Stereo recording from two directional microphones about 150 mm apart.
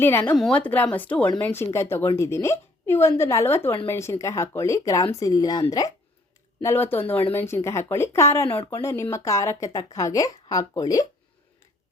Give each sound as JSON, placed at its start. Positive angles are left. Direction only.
{"t": 0.0, "sound": "a woman's voice", "side_deg": 15}